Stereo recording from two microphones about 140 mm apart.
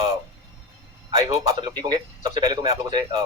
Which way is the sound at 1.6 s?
30° right (ahead or behind).